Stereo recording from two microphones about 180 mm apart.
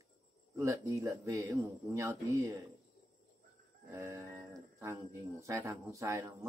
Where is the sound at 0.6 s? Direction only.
15° right (ahead or behind).